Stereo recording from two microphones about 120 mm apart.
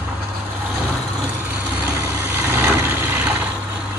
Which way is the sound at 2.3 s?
15° right (ahead or behind).